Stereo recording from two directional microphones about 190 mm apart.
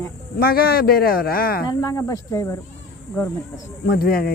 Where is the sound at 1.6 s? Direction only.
15° left (ahead or behind).